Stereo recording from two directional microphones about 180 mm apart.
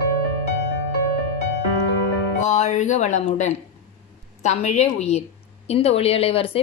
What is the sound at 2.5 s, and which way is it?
Speech, 40° left (ahead or behind).